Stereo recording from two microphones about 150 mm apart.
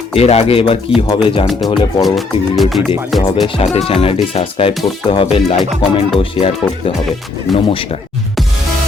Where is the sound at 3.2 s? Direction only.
35° left (ahead or behind).